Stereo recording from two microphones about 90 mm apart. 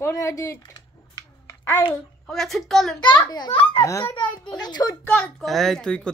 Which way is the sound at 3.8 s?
35° left (ahead or behind).